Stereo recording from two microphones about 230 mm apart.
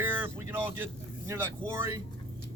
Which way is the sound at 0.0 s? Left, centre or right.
Centre.